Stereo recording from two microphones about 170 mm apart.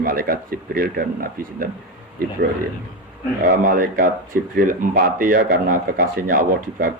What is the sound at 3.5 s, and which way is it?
Speech, 55° right (ahead or behind).